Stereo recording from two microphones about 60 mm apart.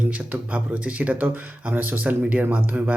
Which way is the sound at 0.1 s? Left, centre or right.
Right.